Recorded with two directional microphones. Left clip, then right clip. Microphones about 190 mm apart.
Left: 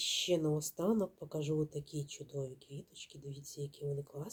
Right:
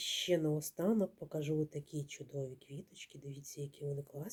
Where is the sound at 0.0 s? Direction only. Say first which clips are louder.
Left 1 dB; 10° right (ahead or behind).